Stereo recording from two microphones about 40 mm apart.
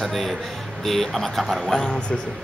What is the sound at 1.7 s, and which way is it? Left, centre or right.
Speech, left.